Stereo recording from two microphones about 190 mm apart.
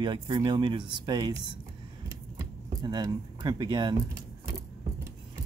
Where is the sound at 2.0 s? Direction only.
20° right (ahead or behind).